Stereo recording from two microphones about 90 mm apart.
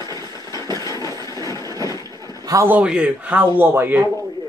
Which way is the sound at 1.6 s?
40° right (ahead or behind).